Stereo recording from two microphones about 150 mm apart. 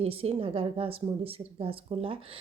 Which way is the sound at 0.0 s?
40° right (ahead or behind).